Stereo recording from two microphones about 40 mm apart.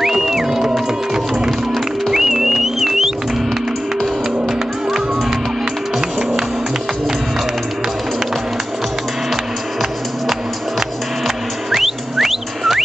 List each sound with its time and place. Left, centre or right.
0.0 s music: centre
2.1 s music: centre
4.5 s music: centre
11.2 s music: centre